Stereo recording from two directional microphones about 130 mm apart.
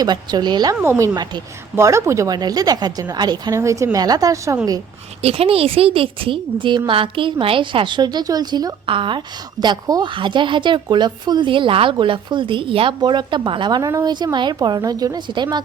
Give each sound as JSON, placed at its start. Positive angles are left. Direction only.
{"t": 0.0, "sound": "speech", "side_deg": -30}
{"t": 0.8, "sound": "a woman's voice", "side_deg": -20}
{"t": 5.2, "sound": "speech", "side_deg": -50}